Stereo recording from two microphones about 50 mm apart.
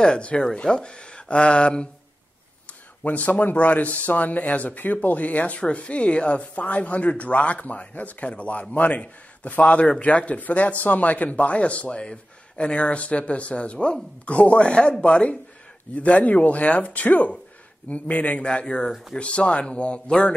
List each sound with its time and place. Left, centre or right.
0.0 s speech: left
3.0 s speech: left